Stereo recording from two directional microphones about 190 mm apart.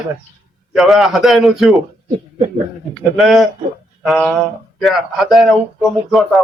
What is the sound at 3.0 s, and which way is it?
A man's voice, centre (ahead or behind).